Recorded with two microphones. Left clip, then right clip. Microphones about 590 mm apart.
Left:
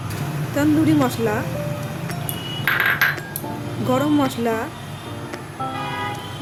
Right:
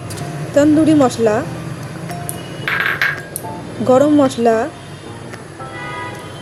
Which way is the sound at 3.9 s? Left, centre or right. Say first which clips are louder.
Right 8 dB; left.